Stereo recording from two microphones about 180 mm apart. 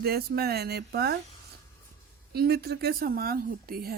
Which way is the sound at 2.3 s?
60° right (ahead or behind).